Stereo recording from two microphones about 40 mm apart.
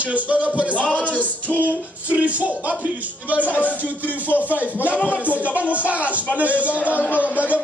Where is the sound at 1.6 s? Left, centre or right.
Right.